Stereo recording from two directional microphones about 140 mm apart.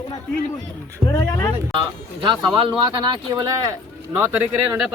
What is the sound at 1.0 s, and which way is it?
Speech, 20° left (ahead or behind).